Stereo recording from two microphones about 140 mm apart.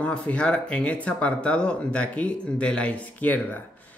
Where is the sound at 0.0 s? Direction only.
10° left (ahead or behind).